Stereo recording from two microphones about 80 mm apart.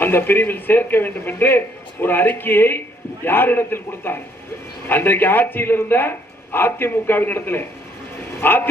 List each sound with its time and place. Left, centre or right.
0.0 s a man's voice: left